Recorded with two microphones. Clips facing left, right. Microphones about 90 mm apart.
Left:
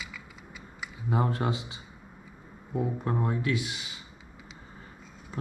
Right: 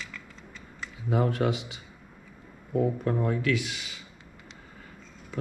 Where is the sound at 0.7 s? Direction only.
15° left (ahead or behind).